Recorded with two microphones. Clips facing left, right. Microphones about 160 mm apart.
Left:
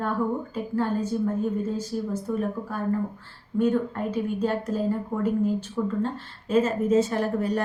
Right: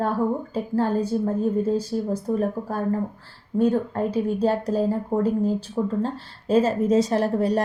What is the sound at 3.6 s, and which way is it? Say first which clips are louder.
A woman's voice: right 2 dB; 35° right (ahead or behind).